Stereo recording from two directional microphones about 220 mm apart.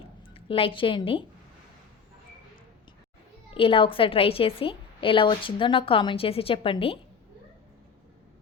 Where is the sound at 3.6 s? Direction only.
25° left (ahead or behind).